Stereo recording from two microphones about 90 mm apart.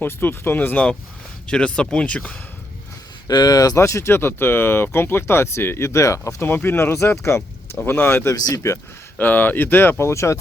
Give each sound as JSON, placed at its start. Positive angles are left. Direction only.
{"t": 0.0, "sound": "speech", "side_deg": 25}
{"t": 1.5, "sound": "speech", "side_deg": 10}
{"t": 3.2, "sound": "speech", "side_deg": 45}
{"t": 6.5, "sound": "speech", "side_deg": 25}
{"t": 9.1, "sound": "speech", "side_deg": 20}